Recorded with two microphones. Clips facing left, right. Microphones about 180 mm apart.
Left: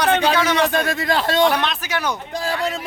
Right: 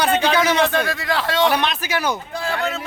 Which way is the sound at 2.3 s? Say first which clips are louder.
Left 1 dB; 35° left (ahead or behind).